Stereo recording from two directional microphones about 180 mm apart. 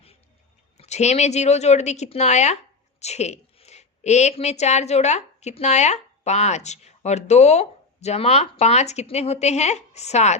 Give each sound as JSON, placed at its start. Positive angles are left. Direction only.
{"t": 0.8, "sound": "a woman's voice", "side_deg": 40}